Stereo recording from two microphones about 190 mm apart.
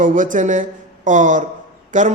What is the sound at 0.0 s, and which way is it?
A man's voice, 45° right (ahead or behind).